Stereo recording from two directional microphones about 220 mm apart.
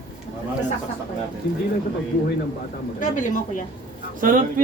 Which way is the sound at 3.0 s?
35° left (ahead or behind).